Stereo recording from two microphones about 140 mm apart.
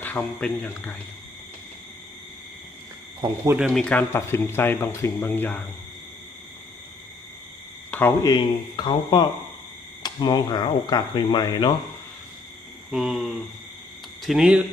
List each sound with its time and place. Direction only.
0.0 s speech: 10° left (ahead or behind)
3.2 s speech: 20° right (ahead or behind)
3.6 s speech: 5° left (ahead or behind)
7.9 s a sound: 15° left (ahead or behind)
8.2 s speech: 30° left (ahead or behind)
12.9 s speech: 5° right (ahead or behind)